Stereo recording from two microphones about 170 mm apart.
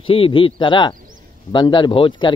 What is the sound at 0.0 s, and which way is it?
Speech, 30° left (ahead or behind).